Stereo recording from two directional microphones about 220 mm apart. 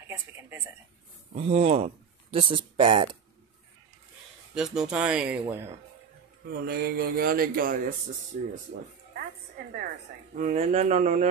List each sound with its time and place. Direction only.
0.1 s speech: 10° right (ahead or behind)
1.3 s speech: 30° right (ahead or behind)
4.6 s speech: 5° right (ahead or behind)
6.6 s speech: 45° right (ahead or behind)
10.3 s speech: 30° right (ahead or behind)